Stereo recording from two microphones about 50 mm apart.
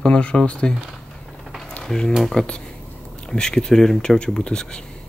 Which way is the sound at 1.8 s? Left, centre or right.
Centre.